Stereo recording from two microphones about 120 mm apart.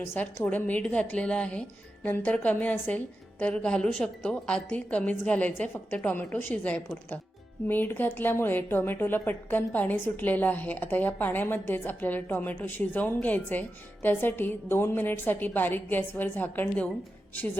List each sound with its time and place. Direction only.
0.0 s speech: 20° left (ahead or behind)